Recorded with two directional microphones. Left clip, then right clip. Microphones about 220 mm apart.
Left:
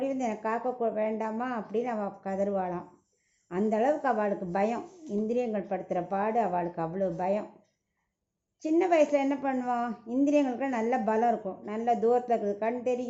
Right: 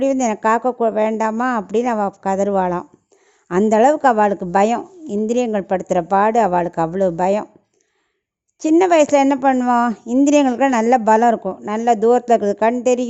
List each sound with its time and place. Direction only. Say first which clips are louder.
0.0 s a woman's voice: right 14 dB; 45° right (ahead or behind)
8.5 s a woman's voice: right 11 dB; 50° right (ahead or behind)